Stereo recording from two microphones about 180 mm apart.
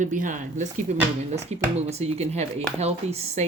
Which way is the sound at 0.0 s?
45° right (ahead or behind).